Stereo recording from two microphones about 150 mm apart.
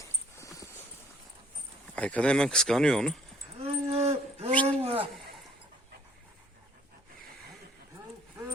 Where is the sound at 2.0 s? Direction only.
10° left (ahead or behind).